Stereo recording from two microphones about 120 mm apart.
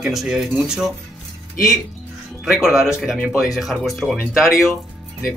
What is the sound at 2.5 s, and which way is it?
Speech, 5° right (ahead or behind).